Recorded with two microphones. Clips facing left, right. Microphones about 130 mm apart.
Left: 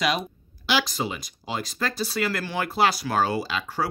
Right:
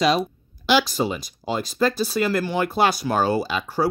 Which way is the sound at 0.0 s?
35° right (ahead or behind).